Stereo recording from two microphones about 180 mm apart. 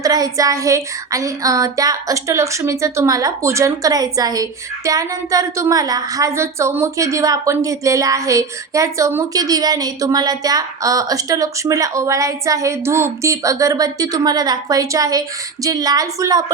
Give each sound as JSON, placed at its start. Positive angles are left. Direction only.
{"t": 0.0, "sound": "a woman's voice", "side_deg": -20}